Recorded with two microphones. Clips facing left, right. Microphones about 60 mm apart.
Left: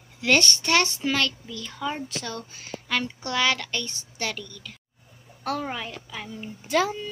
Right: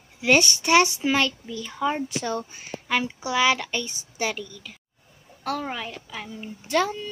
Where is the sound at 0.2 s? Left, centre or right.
Centre.